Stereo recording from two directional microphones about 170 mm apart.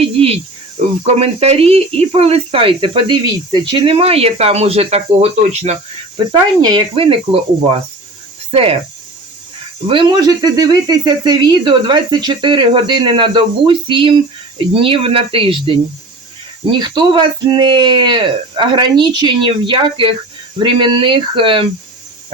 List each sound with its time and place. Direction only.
0.0 s speech: 35° right (ahead or behind)
6.6 s speech: 25° right (ahead or behind)
9.8 s speech: 30° right (ahead or behind)